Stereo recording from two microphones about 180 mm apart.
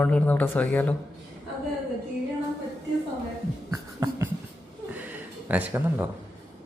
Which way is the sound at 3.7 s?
15° right (ahead or behind).